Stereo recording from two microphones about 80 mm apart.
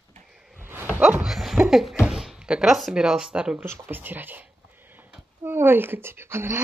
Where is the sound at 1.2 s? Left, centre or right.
Centre.